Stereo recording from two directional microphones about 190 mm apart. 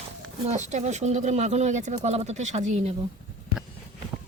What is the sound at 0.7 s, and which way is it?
Speech, 35° right (ahead or behind).